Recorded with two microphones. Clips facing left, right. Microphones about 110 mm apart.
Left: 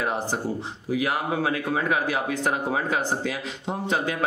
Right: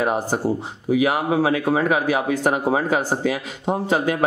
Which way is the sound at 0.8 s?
60° right (ahead or behind).